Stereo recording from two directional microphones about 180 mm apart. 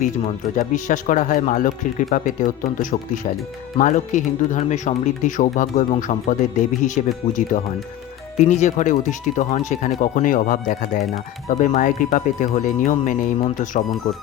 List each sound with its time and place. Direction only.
0.5 s speech: 45° left (ahead or behind)